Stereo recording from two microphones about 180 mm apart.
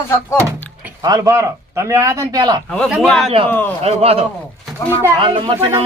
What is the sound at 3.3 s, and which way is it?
A woman's voice, 30° right (ahead or behind).